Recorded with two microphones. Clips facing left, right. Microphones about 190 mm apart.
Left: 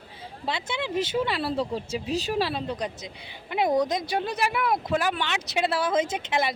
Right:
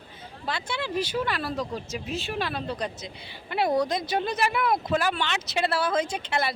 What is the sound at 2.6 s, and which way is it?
Speech, 15° left (ahead or behind).